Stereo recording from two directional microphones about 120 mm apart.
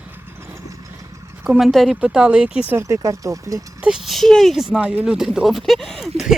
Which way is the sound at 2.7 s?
20° right (ahead or behind).